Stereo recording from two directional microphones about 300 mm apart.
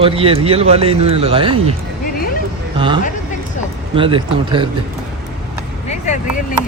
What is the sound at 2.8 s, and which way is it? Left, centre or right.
A man's voice, centre.